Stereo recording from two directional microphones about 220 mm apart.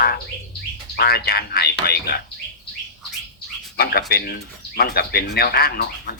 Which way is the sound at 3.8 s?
45° left (ahead or behind).